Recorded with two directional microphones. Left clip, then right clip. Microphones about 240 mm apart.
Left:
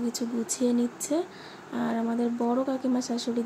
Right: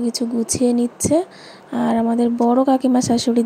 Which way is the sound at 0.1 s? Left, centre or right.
Right.